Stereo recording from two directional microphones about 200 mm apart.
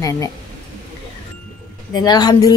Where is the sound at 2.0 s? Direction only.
20° left (ahead or behind).